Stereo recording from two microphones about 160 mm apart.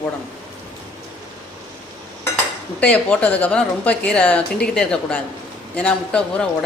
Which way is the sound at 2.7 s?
10° left (ahead or behind).